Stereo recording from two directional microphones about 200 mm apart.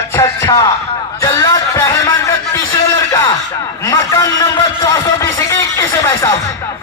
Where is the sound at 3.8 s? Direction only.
15° left (ahead or behind).